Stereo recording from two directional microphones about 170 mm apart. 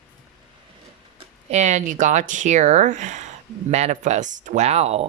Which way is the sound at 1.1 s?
40° right (ahead or behind).